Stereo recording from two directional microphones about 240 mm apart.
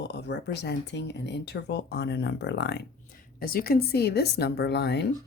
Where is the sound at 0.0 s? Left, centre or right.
Left.